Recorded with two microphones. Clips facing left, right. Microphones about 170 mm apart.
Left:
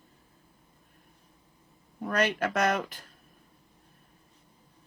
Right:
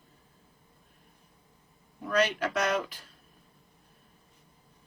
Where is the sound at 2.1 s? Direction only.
50° left (ahead or behind).